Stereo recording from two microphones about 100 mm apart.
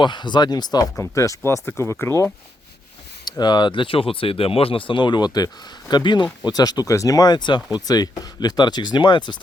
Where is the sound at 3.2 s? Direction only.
45° left (ahead or behind).